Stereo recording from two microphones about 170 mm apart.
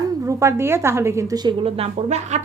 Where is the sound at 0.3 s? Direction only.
20° right (ahead or behind).